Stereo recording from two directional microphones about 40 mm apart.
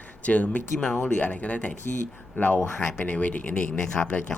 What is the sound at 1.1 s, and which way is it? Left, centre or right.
Speech, left.